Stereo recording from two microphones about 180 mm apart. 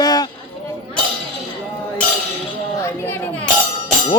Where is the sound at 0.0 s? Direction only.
20° left (ahead or behind).